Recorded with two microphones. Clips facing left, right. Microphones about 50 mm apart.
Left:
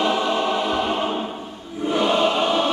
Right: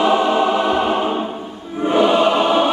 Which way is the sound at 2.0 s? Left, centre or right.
Right.